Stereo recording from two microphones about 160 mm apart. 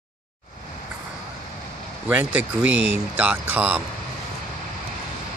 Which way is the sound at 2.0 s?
10° right (ahead or behind).